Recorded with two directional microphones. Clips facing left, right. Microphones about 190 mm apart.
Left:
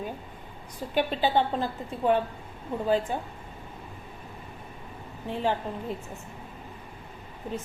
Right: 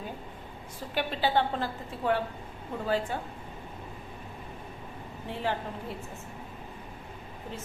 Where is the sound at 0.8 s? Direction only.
15° left (ahead or behind).